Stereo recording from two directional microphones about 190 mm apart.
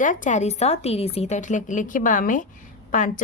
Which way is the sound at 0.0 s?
45° left (ahead or behind).